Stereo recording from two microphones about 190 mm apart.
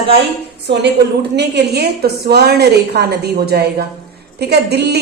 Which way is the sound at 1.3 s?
60° right (ahead or behind).